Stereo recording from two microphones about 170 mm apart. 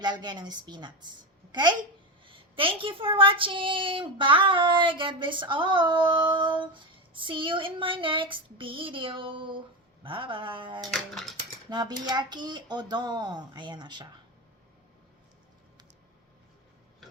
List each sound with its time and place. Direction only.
0.0 s a child's voice: 25° right (ahead or behind)
2.2 s a child's voice: 30° right (ahead or behind)
10.9 s speech: centre (ahead or behind)
11.7 s a child's voice: 25° right (ahead or behind)